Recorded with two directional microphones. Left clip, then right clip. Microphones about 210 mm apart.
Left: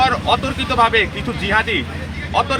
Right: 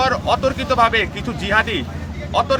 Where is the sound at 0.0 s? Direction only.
25° right (ahead or behind).